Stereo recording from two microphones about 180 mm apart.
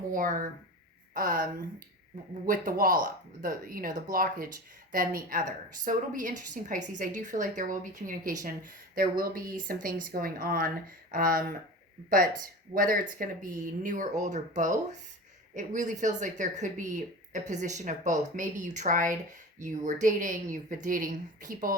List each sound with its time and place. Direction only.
0.1 s speech: 50° right (ahead or behind)
2.5 s speech: 50° right (ahead or behind)
12.7 s speech: 50° right (ahead or behind)